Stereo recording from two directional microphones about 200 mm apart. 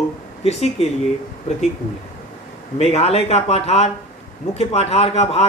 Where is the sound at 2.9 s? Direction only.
30° left (ahead or behind).